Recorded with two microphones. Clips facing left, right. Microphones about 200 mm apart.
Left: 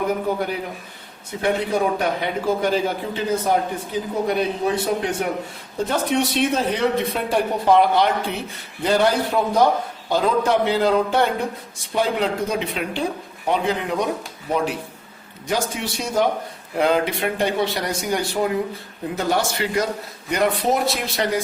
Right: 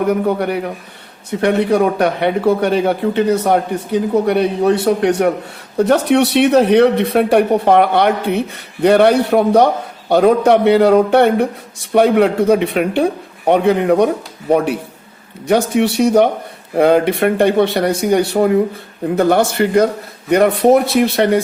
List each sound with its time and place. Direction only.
0.1 s a man's voice: 70° right (ahead or behind)